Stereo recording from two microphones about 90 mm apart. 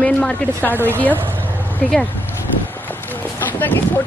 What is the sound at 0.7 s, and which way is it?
Speech, 25° right (ahead or behind).